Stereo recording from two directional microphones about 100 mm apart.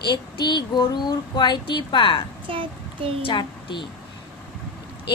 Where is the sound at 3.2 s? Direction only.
50° left (ahead or behind).